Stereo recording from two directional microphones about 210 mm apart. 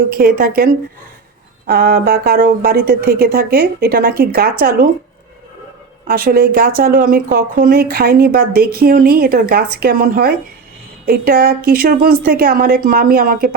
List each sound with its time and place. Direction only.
0.1 s speech: 45° right (ahead or behind)
6.1 s speech: 45° right (ahead or behind)